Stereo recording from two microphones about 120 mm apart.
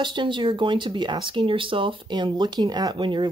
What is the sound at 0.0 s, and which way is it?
Speech, 40° right (ahead or behind).